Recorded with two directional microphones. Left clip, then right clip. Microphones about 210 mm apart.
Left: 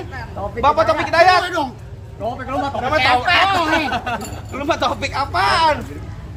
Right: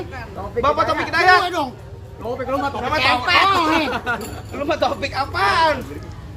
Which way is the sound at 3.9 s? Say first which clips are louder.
Left 1 dB; 50° left (ahead or behind).